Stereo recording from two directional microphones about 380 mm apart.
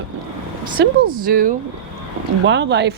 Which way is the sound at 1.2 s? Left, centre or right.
Right.